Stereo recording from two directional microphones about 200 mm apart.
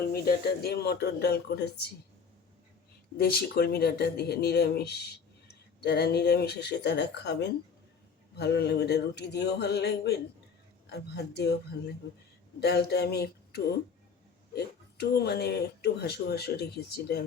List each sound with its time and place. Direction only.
0.0 s speech: 50° left (ahead or behind)
3.2 s speech: 50° left (ahead or behind)
12.5 s speech: 55° left (ahead or behind)